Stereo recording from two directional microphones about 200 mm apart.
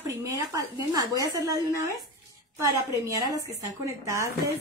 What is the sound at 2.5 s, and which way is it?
A woman's voice, 15° right (ahead or behind).